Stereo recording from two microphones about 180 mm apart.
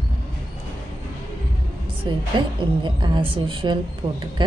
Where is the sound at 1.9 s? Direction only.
30° right (ahead or behind).